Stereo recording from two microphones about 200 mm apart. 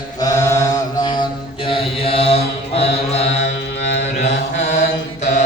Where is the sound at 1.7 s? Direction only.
30° left (ahead or behind).